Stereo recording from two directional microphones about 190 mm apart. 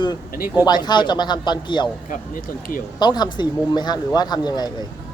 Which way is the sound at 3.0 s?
20° left (ahead or behind).